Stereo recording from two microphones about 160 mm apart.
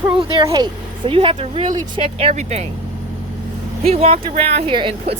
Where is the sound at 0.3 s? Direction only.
25° right (ahead or behind); by 2.6 s 45° right (ahead or behind).